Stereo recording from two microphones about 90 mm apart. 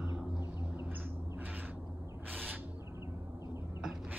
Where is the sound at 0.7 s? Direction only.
25° right (ahead or behind).